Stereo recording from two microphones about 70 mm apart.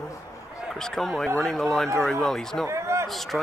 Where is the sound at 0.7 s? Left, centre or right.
Centre.